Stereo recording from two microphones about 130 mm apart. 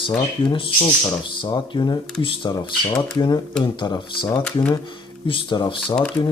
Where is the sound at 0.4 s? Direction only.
40° left (ahead or behind).